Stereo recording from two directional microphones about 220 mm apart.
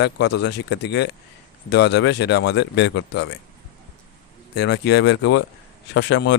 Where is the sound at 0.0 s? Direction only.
50° left (ahead or behind).